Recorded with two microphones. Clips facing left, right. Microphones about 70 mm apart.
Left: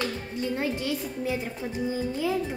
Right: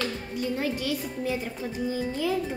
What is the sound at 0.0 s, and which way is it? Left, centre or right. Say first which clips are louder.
Music: even; left.